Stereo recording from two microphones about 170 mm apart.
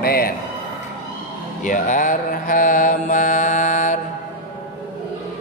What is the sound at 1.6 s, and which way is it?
Mantra, 50° left (ahead or behind).